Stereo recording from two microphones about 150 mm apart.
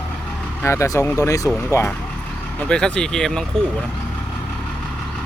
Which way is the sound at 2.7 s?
5° left (ahead or behind).